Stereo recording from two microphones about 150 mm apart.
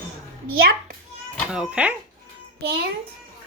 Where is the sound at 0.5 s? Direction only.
75° right (ahead or behind).